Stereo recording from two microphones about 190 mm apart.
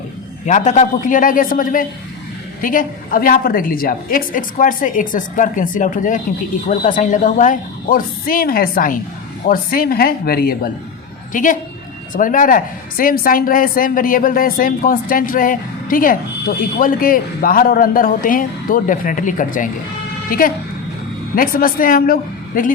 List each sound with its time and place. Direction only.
0.4 s a woman's voice: 40° left (ahead or behind)